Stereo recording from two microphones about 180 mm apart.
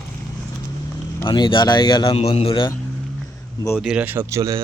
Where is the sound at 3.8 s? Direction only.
5° right (ahead or behind).